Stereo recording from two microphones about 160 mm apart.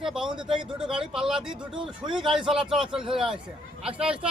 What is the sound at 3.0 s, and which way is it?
Speech, 35° right (ahead or behind).